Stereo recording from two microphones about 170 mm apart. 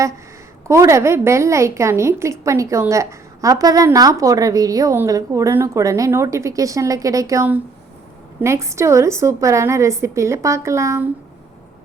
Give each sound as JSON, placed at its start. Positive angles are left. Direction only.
{"t": 0.7, "sound": "a woman's voice", "side_deg": -15}